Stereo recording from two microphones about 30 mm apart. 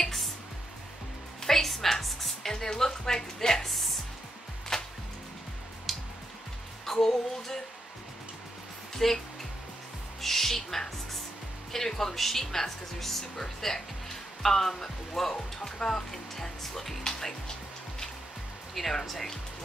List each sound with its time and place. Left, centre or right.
0.0 s music: centre
1.4 s music: centre
2.5 s music: left
4.7 s music: centre
5.9 s music: centre
6.9 s music: centre
8.9 s music: centre
10.2 s music: centre
19.0 s music: centre